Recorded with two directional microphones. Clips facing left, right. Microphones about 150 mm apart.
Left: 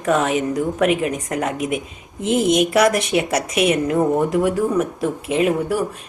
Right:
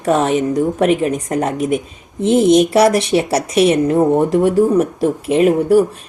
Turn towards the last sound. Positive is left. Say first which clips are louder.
# right 7 dB
turn(degrees=-40)  # may be behind; listen again after turning